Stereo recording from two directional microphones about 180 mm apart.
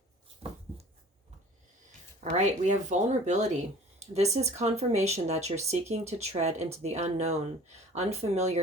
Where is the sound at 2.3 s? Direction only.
40° right (ahead or behind).